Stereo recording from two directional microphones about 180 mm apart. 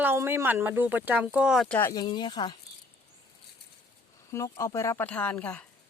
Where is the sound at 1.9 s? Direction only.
20° left (ahead or behind).